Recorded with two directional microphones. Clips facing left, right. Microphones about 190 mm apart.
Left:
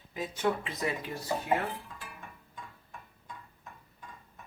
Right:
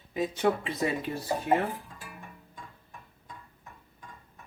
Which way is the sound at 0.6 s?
30° right (ahead or behind).